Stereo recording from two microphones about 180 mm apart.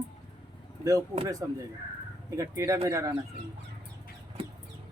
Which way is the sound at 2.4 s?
15° right (ahead or behind).